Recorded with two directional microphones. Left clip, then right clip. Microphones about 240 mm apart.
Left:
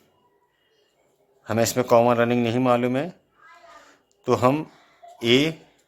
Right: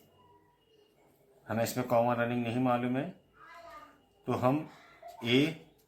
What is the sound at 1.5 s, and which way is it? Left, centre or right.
Speech, left.